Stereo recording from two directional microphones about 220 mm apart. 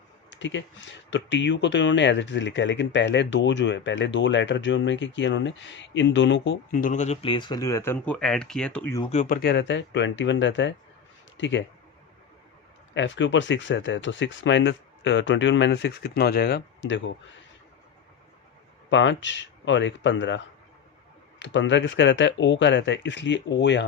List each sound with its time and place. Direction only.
0.3 s speech: 55° left (ahead or behind)
6.7 s speech: 40° left (ahead or behind); by 9.0 s 5° left (ahead or behind)
9.0 s speech: 30° left (ahead or behind); by 11.6 s 55° left (ahead or behind)
12.9 s speech: 55° left (ahead or behind)
18.9 s speech: 55° left (ahead or behind)